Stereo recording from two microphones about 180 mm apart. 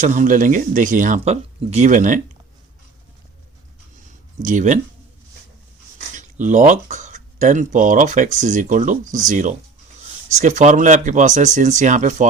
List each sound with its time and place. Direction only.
0.0 s speech: 45° right (ahead or behind)
4.4 s speech: 45° right (ahead or behind)
6.1 s speech: 45° right (ahead or behind)